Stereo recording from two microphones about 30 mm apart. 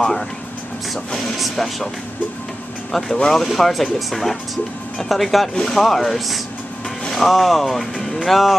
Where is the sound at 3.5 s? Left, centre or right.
Centre.